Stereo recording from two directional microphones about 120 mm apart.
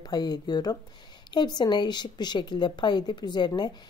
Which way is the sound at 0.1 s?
35° left (ahead or behind).